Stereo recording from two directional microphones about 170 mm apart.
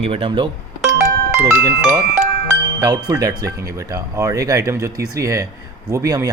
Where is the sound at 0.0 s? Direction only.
35° right (ahead or behind).